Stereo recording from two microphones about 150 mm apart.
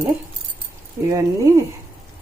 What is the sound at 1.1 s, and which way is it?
Speech, 20° right (ahead or behind).